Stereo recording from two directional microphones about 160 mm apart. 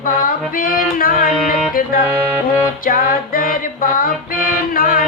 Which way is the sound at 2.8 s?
60° left (ahead or behind).